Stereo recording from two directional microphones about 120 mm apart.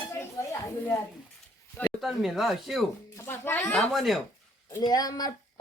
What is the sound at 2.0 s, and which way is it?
Speech, centre (ahead or behind).